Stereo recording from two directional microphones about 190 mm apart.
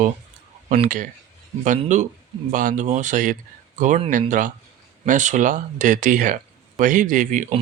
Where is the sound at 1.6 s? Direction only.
40° right (ahead or behind).